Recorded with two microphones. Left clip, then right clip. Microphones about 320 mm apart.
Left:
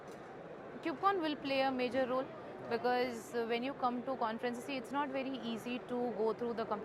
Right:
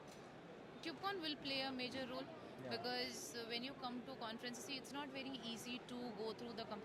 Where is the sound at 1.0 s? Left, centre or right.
Centre.